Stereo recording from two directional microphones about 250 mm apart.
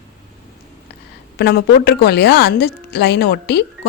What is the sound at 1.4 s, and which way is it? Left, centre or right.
A woman's voice, left.